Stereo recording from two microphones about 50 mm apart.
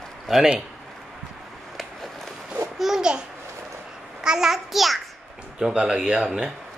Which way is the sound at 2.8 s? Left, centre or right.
Centre.